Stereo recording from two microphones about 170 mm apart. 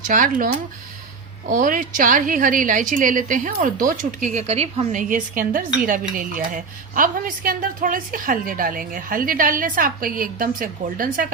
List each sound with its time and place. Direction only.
0.0 s a woman's voice: 50° right (ahead or behind)
4.4 s a woman's voice: 40° right (ahead or behind)
4.9 s dishes: 50° right (ahead or behind)